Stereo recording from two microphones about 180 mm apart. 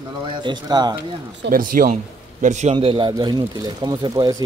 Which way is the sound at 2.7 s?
30° right (ahead or behind).